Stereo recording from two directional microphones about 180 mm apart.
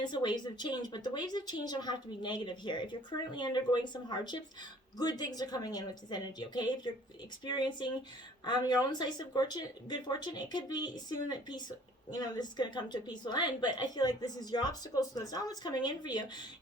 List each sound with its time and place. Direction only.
0.0 s a woman's voice: 25° left (ahead or behind)